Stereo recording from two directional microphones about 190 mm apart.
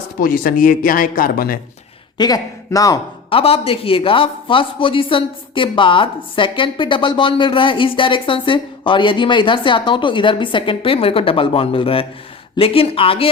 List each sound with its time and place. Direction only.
0.2 s speech: 50° left (ahead or behind)
2.1 s a man's voice: 20° left (ahead or behind)